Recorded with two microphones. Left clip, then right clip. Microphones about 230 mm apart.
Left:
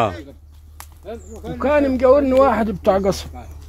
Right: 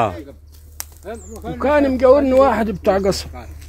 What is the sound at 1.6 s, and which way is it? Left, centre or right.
Speech, centre.